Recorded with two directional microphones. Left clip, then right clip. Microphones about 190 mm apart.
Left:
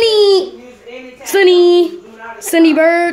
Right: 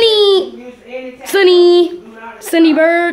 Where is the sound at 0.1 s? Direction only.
5° left (ahead or behind).